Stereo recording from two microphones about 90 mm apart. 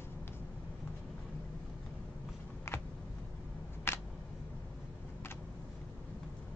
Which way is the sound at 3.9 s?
25° left (ahead or behind).